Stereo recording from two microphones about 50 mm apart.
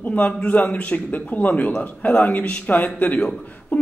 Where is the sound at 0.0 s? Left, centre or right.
Left.